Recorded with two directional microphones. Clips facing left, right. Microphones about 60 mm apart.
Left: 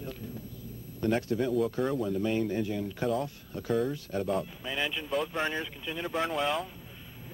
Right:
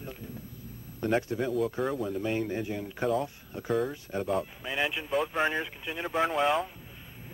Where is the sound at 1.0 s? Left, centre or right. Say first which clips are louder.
Even; centre.